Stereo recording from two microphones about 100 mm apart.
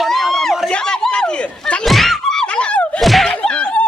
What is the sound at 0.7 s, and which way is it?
Thunk, 10° left (ahead or behind).